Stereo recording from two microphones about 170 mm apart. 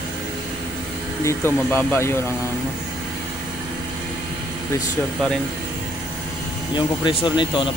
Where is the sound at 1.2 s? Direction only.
15° left (ahead or behind).